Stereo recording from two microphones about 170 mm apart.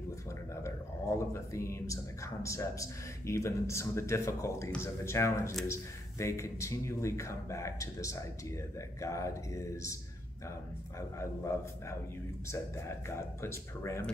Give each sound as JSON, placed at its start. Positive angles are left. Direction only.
{"t": 0.7, "sound": "speech", "side_deg": 15}
{"t": 11.0, "sound": "speech", "side_deg": 15}